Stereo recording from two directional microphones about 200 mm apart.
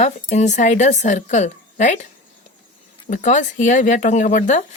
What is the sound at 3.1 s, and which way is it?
A woman's voice, 40° left (ahead or behind).